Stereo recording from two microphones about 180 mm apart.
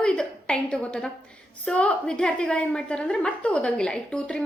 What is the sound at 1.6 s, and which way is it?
A woman's voice, 5° left (ahead or behind).